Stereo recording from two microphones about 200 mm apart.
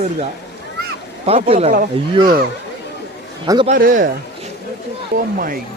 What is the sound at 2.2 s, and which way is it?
Speech, 45° right (ahead or behind).